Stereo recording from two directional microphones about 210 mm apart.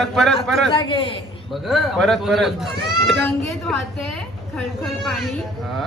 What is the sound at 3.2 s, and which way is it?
Speech, 10° left (ahead or behind).